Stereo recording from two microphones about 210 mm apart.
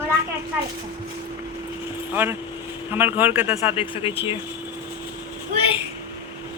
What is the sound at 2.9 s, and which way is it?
Speech, 10° right (ahead or behind).